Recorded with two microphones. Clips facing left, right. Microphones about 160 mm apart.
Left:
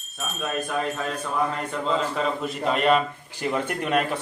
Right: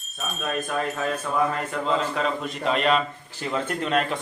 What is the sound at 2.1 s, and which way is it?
A man's voice, centre (ahead or behind).